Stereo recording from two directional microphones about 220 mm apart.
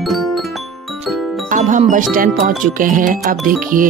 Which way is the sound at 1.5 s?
35° right (ahead or behind).